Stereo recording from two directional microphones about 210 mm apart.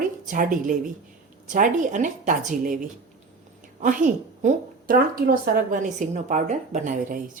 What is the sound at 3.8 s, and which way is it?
A woman's voice, 40° right (ahead or behind).